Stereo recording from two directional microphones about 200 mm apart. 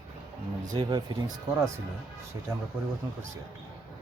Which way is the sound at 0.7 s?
20° right (ahead or behind).